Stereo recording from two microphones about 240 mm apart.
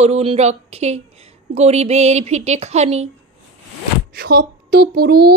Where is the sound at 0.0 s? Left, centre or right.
Right.